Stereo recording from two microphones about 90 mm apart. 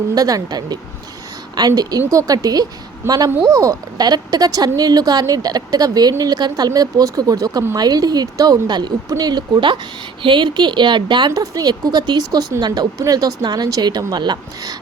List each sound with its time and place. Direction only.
0.1 s a woman's voice: 40° right (ahead or behind); by 11.3 s 60° right (ahead or behind)
11.3 s speech: 45° right (ahead or behind)